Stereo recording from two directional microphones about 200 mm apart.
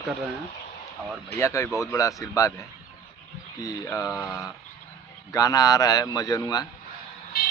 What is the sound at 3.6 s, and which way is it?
Speech, 15° left (ahead or behind).